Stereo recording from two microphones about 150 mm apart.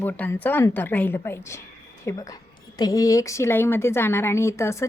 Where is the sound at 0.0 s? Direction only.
10° left (ahead or behind).